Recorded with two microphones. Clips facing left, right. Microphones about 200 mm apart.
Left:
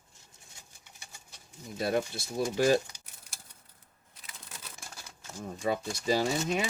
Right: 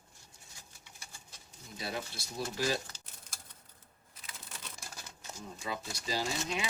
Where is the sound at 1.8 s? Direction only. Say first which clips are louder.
Left 10 dB; 50° left (ahead or behind).